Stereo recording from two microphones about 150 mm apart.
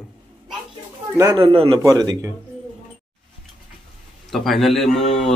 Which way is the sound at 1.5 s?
40° right (ahead or behind).